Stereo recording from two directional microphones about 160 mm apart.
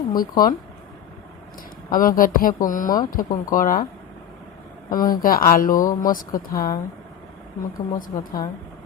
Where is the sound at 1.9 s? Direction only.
60° left (ahead or behind).